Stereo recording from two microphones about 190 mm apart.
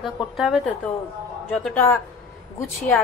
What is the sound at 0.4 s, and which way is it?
A woman's voice, centre (ahead or behind).